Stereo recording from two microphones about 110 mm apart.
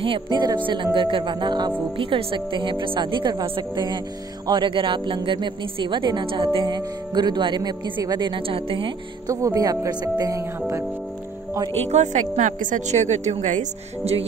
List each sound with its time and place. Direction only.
0.0 s a woman's voice: 45° right (ahead or behind)
2.0 s a woman's voice: 55° right (ahead or behind)
9.3 s speech: 30° right (ahead or behind)
11.9 s a woman's voice: 90° right